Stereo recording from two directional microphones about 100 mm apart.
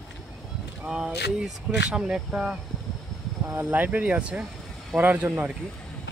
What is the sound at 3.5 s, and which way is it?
Speech, 20° right (ahead or behind).